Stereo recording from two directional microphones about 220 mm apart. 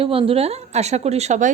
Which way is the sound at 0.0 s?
25° right (ahead or behind).